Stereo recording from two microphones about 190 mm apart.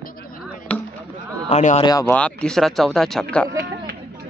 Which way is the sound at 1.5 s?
35° left (ahead or behind).